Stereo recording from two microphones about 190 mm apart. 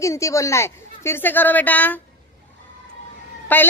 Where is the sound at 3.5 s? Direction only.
10° left (ahead or behind).